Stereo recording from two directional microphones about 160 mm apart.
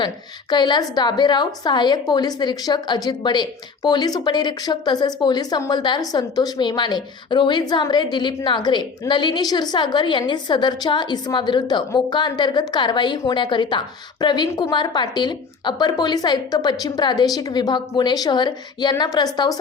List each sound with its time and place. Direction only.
0.5 s speech: 25° left (ahead or behind)